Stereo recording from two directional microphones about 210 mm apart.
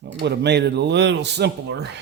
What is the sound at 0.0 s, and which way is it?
Speech, 50° right (ahead or behind).